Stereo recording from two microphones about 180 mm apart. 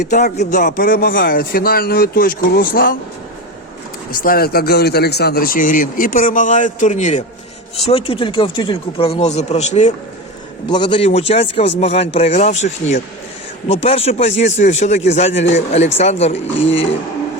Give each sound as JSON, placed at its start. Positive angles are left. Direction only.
{"t": 0.1, "sound": "speech", "side_deg": 40}
{"t": 4.1, "sound": "speech", "side_deg": 50}
{"t": 10.7, "sound": "speech", "side_deg": 25}